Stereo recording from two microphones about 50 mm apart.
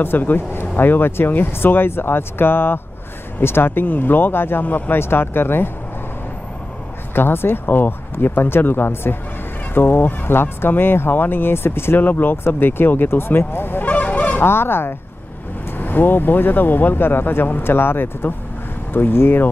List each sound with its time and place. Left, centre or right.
0.0 s speech: left
7.2 s speech: left
12.0 s speech: left
13.8 s goose: left
14.4 s speech: left